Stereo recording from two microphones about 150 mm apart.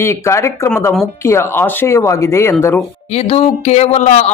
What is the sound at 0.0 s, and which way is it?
Speech, 20° left (ahead or behind).